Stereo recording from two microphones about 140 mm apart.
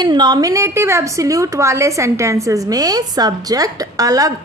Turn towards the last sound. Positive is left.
turn(degrees=-25)  # may be behind; listen again after turning